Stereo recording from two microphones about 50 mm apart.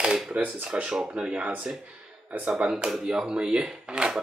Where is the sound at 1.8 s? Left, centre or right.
Right.